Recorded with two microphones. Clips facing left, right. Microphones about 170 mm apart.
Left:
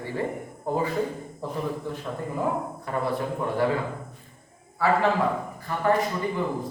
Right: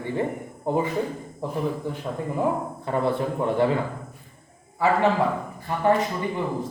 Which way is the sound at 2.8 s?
25° right (ahead or behind).